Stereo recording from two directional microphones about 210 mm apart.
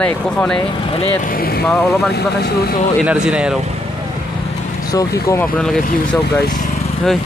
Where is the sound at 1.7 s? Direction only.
10° left (ahead or behind).